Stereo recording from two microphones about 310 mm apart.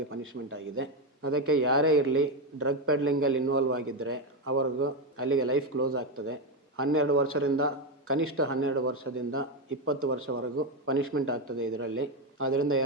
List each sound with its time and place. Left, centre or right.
0.1 s a man's voice: right